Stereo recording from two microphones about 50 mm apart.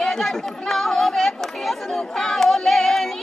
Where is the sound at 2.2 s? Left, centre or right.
Centre.